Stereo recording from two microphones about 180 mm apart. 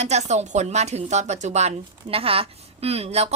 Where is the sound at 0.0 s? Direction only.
40° right (ahead or behind).